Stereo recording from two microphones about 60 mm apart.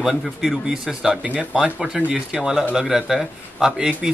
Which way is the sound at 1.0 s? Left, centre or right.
Centre.